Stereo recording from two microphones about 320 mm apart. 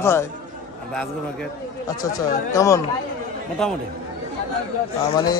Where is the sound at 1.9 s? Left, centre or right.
Centre.